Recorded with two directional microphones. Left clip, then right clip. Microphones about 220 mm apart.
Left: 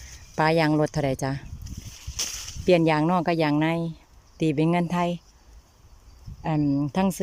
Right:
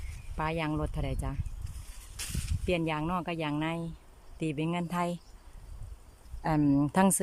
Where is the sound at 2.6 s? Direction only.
20° left (ahead or behind).